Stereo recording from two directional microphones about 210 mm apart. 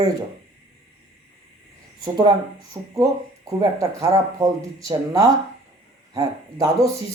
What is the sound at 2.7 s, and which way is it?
Speech, 20° right (ahead or behind).